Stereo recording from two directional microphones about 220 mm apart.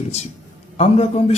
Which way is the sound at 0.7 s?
30° left (ahead or behind).